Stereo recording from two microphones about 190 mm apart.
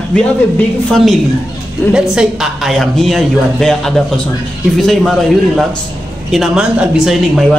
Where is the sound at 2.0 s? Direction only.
5° right (ahead or behind).